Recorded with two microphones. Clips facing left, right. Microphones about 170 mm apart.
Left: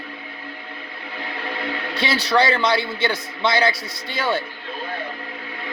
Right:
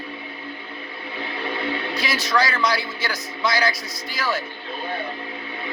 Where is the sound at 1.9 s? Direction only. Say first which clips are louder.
Left 5 dB; 30° left (ahead or behind).